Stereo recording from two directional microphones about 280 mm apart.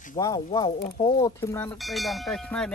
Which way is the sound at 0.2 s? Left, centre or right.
Centre.